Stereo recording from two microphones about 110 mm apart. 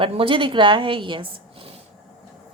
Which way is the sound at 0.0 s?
50° right (ahead or behind).